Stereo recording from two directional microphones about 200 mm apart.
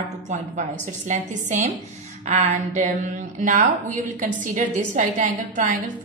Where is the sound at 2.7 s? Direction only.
35° right (ahead or behind).